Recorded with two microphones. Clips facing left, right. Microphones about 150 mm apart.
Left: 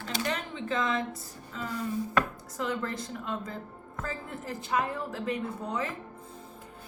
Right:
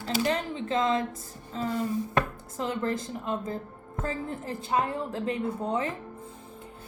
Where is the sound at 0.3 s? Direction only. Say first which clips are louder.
Right 4 dB; 25° right (ahead or behind).